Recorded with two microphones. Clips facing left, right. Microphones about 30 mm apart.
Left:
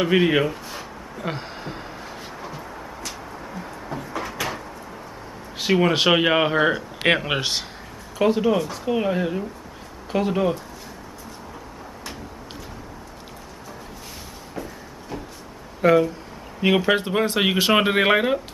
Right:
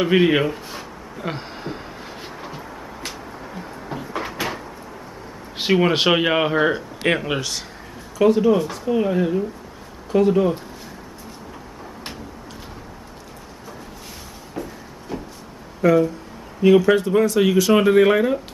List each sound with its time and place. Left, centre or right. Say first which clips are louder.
0.0 s speech: right 2 dB; centre
3.9 s cupboard open or close: right 2 dB; right
5.7 s speech: right 1 dB; centre
7.2 s speech: left 1 dB; left
8.2 s speech: right 4 dB; centre
14.5 s vehicle: right 3 dB; centre
15.8 s speech: right 1 dB; left